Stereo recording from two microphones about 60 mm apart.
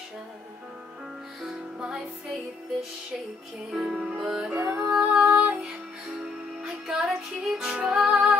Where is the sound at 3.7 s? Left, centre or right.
Centre.